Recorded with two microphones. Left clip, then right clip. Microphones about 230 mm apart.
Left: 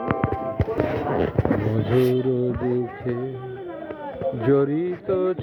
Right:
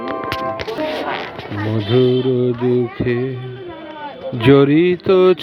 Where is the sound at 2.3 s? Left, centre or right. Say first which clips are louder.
Right 7 dB; right.